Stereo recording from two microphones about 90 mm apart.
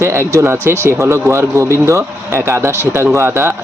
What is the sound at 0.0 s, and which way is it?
Speech, 30° right (ahead or behind).